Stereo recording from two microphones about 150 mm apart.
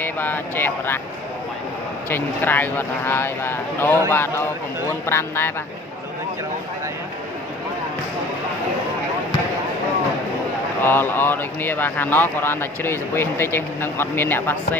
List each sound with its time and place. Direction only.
0.0 s speech: 15° left (ahead or behind)
2.0 s speech: 15° left (ahead or behind)
10.8 s speech: 15° left (ahead or behind)